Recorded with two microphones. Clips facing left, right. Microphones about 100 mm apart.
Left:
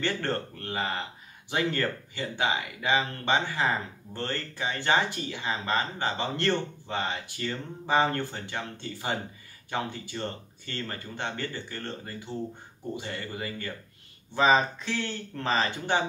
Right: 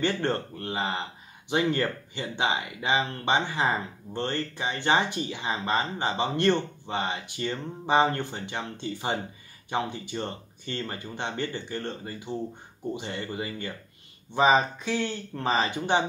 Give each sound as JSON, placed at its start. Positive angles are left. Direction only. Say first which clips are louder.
{"t": 0.0, "sound": "speech", "louder": "right 3 dB", "side_deg": -20}